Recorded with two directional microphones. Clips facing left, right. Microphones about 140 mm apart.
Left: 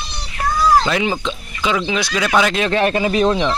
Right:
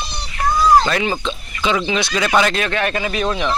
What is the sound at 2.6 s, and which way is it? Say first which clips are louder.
Speech: left 4 dB; 30° left (ahead or behind).